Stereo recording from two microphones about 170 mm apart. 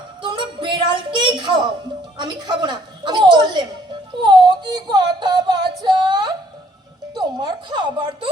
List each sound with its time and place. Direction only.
0.2 s music: 30° right (ahead or behind)
2.1 s a woman's voice: 25° right (ahead or behind)
5.8 s a sound: 25° right (ahead or behind)
7.1 s a woman's voice: 25° right (ahead or behind)